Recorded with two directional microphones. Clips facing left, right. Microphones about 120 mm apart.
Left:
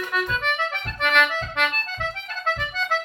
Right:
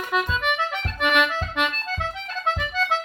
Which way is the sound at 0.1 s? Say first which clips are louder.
Right 4 dB; 20° right (ahead or behind).